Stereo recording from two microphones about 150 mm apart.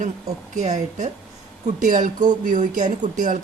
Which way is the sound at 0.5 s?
55° right (ahead or behind).